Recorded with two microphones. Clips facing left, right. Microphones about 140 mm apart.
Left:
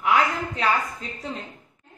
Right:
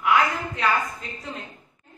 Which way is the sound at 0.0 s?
30° left (ahead or behind).